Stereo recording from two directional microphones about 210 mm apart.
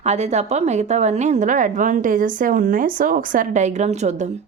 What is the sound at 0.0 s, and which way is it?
A woman's voice, 30° right (ahead or behind).